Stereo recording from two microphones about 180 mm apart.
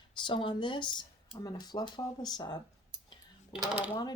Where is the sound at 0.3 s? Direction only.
25° left (ahead or behind).